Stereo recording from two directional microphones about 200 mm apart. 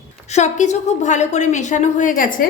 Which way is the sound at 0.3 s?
35° left (ahead or behind).